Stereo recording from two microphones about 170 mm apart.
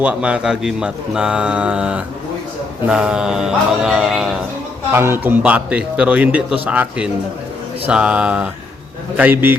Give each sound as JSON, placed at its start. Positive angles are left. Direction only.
{"t": 0.0, "sound": "speech", "side_deg": -5}
{"t": 4.9, "sound": "a man's voice", "side_deg": -15}